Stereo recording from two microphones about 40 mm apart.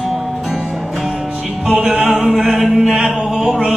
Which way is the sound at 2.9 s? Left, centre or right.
Centre.